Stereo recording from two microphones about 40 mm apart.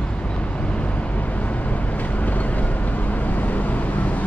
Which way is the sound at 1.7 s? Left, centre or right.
Left.